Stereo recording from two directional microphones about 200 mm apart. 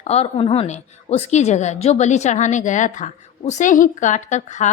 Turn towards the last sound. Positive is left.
turn(degrees=35)  # may be behind; listen again after turning